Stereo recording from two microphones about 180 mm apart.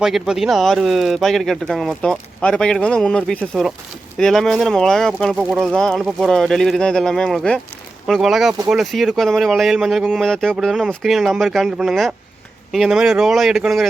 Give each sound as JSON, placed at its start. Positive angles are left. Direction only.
{"t": 0.0, "sound": "speech", "side_deg": 0}